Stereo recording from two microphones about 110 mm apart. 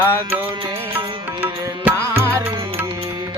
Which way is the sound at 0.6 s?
55° right (ahead or behind).